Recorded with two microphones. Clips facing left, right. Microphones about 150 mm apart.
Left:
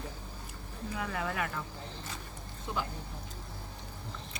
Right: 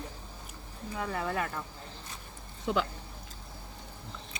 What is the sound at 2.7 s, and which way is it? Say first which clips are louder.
Speech: right 7 dB; 80° right.